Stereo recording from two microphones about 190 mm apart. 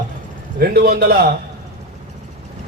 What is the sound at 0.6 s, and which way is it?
Speech, 55° right (ahead or behind).